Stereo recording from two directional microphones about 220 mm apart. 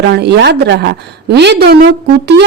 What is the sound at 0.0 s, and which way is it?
A woman's voice, 50° right (ahead or behind).